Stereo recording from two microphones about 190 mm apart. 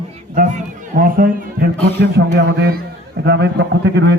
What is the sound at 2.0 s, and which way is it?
A man's voice, 60° right (ahead or behind).